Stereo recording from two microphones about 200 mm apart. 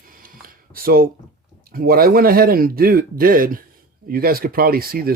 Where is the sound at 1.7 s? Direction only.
50° right (ahead or behind).